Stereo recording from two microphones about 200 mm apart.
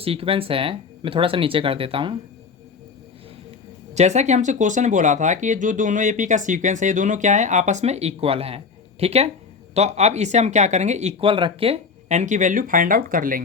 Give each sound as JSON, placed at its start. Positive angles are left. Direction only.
{"t": 0.0, "sound": "speech", "side_deg": -30}
{"t": 3.9, "sound": "speech", "side_deg": -35}